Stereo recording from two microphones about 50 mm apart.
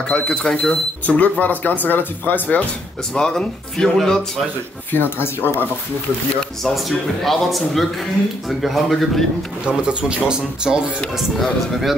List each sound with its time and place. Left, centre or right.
0.1 s speech: centre
1.0 s speech: left
3.2 s speech: centre
4.9 s speech: left
7.2 s speech: centre
9.7 s speech: centre
11.1 s speech: centre